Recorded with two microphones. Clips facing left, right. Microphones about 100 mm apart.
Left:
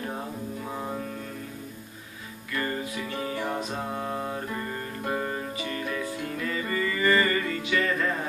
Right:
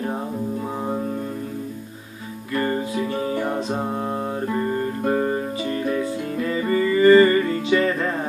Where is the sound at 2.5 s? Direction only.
35° right (ahead or behind).